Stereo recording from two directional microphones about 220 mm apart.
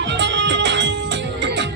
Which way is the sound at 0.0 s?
55° right (ahead or behind).